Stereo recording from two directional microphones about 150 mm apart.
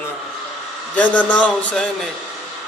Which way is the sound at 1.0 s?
10° left (ahead or behind).